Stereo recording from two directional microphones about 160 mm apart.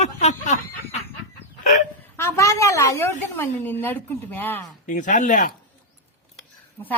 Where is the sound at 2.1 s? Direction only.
15° left (ahead or behind).